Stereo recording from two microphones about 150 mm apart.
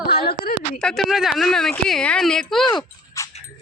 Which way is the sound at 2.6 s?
30° left (ahead or behind).